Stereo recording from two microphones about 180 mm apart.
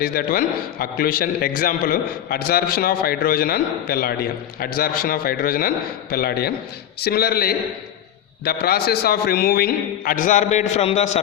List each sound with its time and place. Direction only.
0.0 s a man's voice: 55° left (ahead or behind); by 11.2 s 35° left (ahead or behind)